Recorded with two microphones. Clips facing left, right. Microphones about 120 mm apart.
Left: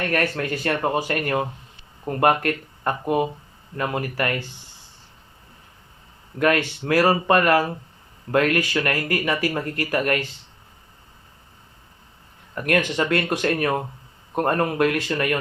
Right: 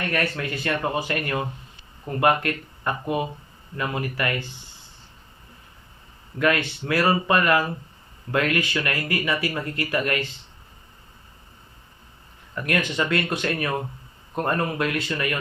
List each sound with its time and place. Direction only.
0.0 s speech: 45° left (ahead or behind)
6.4 s speech: 45° left (ahead or behind)
12.5 s speech: 45° left (ahead or behind)